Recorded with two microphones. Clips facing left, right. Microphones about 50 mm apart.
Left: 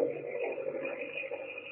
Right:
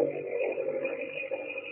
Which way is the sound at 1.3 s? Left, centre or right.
Right.